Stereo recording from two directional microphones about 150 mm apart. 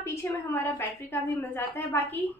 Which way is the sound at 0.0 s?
15° left (ahead or behind).